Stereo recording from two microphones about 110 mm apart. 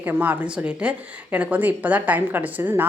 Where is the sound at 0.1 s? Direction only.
15° right (ahead or behind).